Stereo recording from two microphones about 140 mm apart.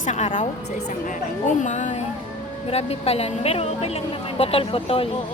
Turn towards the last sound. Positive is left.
turn(degrees=40)  # may be behind; listen again after turning